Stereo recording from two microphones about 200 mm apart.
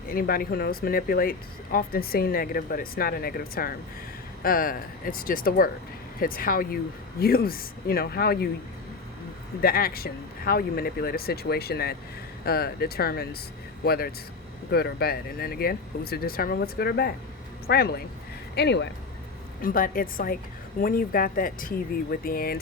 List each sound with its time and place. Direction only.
0.1 s speech: 45° left (ahead or behind)
9.6 s speech: 50° left (ahead or behind)
19.6 s speech: 45° left (ahead or behind)